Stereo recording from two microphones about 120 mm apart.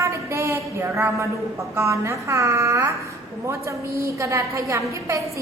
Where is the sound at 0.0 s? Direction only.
25° right (ahead or behind).